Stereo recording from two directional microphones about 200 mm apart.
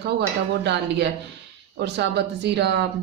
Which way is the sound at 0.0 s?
55° right (ahead or behind).